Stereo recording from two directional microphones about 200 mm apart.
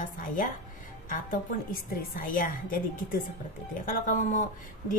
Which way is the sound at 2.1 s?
45° left (ahead or behind).